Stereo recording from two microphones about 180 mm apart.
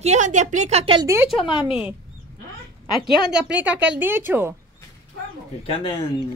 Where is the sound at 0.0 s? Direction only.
40° right (ahead or behind).